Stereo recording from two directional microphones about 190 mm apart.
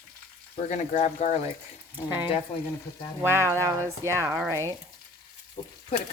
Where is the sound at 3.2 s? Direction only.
15° right (ahead or behind).